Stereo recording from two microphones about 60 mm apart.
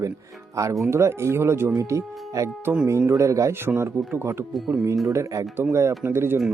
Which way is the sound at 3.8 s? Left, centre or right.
Right.